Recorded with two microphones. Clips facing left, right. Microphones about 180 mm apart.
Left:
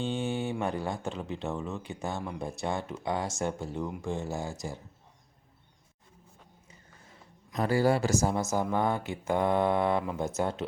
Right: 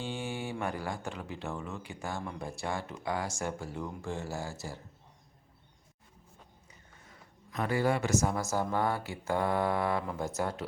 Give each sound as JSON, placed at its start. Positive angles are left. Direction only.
{"t": 0.0, "sound": "mantra", "side_deg": 20}
{"t": 0.6, "sound": "speech", "side_deg": 25}
{"t": 7.5, "sound": "speech", "side_deg": 35}